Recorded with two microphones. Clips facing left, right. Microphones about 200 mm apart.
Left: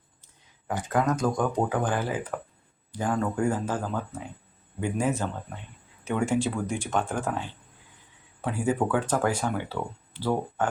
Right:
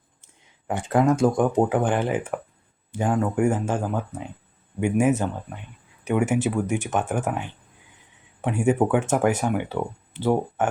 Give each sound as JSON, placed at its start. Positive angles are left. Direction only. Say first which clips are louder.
{"t": 0.7, "sound": "speech", "louder": "right 5 dB", "side_deg": -25}